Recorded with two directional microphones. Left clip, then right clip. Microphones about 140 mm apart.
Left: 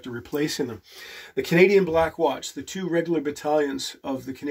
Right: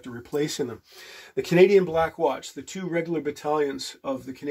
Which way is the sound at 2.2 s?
30° right (ahead or behind).